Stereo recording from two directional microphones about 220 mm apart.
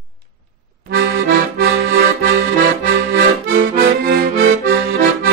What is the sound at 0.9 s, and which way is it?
Accordion, 50° right (ahead or behind).